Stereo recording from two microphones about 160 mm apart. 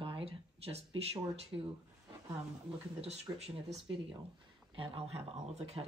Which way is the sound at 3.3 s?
25° right (ahead or behind).